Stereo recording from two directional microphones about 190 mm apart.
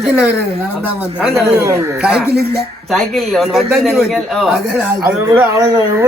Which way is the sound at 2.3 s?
55° right (ahead or behind).